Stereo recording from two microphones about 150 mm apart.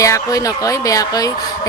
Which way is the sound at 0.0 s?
20° left (ahead or behind).